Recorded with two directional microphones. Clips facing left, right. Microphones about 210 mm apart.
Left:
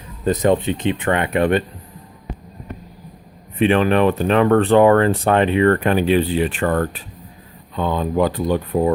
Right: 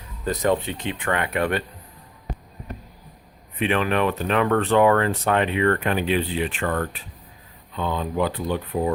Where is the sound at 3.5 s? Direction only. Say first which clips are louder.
Left 7 dB; 30° left (ahead or behind).